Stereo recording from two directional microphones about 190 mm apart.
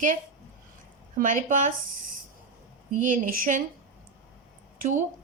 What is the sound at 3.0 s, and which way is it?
Speech, 45° right (ahead or behind).